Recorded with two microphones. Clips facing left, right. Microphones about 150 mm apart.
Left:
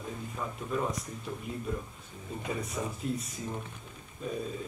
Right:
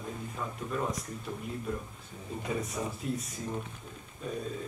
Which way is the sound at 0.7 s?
Centre (ahead or behind).